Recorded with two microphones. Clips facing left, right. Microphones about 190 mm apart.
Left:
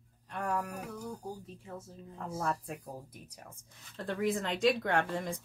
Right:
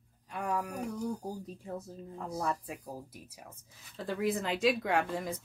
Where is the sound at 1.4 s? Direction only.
35° right (ahead or behind).